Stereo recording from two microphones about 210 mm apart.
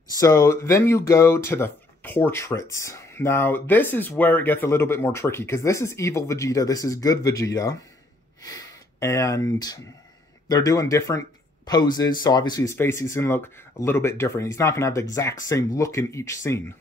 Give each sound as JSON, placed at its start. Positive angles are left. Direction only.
{"t": 0.2, "sound": "speech", "side_deg": 15}